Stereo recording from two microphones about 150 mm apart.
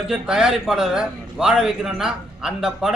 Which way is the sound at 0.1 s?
5° right (ahead or behind).